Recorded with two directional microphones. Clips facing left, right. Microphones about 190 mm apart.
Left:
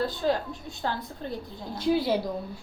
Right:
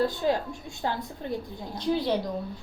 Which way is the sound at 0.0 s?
15° right (ahead or behind).